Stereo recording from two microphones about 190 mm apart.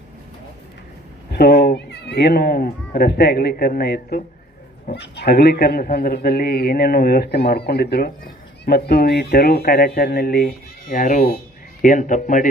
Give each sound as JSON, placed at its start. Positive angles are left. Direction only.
{"t": 1.3, "sound": "a man's voice", "side_deg": 60}